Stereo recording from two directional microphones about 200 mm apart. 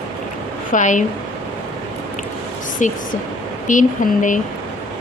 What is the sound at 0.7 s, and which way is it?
Speech, 40° left (ahead or behind).